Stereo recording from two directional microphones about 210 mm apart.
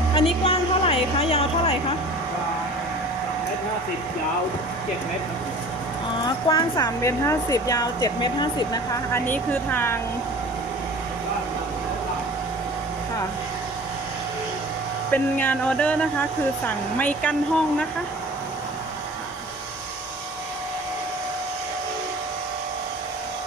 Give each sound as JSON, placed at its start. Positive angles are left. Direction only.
{"t": 0.1, "sound": "a sound", "side_deg": 25}
{"t": 6.2, "sound": "speech", "side_deg": 20}
{"t": 15.0, "sound": "speech", "side_deg": 10}